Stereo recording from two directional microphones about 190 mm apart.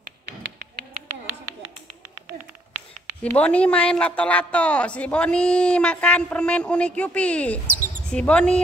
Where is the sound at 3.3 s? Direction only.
5° left (ahead or behind).